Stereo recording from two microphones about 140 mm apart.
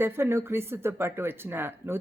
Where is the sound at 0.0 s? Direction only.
15° right (ahead or behind).